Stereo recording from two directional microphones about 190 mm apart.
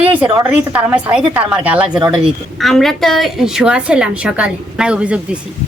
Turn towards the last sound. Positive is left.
turn(degrees=-5)  # may be behind; listen again after turning